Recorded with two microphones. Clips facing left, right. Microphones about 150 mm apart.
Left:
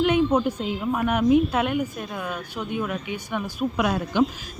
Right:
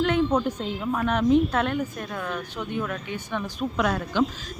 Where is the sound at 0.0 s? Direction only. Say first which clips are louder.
Left 2 dB; 15° left (ahead or behind).